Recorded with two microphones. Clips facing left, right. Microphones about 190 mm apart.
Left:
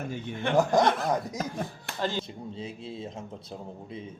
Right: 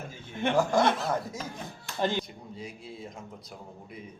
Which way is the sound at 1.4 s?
55° left (ahead or behind).